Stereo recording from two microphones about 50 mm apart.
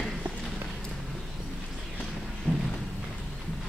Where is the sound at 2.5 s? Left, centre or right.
Left.